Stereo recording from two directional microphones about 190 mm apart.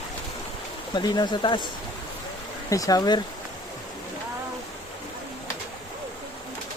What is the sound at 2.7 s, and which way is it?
Speech, 20° left (ahead or behind).